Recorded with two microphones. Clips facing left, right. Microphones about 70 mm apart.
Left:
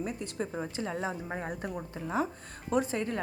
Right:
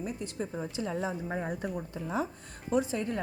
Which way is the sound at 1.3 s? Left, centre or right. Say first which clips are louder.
Right 2 dB; centre.